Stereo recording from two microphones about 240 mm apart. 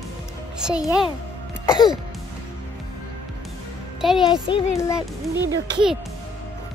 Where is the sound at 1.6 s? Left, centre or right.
Centre.